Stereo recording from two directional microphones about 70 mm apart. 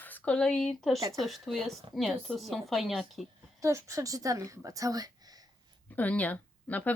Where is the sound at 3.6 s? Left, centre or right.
Right.